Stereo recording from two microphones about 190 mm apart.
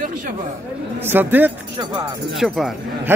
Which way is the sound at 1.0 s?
10° right (ahead or behind).